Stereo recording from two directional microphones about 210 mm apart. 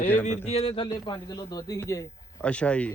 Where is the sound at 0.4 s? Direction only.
30° left (ahead or behind).